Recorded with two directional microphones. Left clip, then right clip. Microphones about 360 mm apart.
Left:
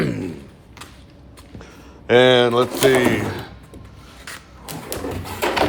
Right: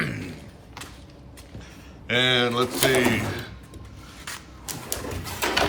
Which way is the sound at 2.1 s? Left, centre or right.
Centre.